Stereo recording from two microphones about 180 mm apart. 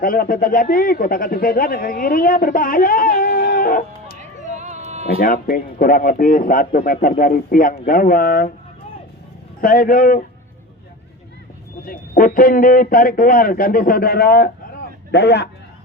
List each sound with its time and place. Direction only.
0.0 s speech: 55° left (ahead or behind)
4.2 s a sound: 40° right (ahead or behind)
5.2 s speech: 50° left (ahead or behind)
9.6 s speech: 55° left (ahead or behind)
11.9 s speech: 50° left (ahead or behind); by 15.4 s 65° left (ahead or behind)